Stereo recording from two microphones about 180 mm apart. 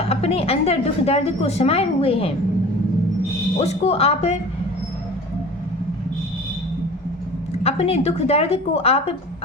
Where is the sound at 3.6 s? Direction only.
35° left (ahead or behind).